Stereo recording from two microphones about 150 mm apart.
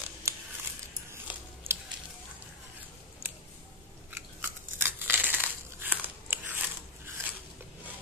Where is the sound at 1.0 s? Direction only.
15° right (ahead or behind).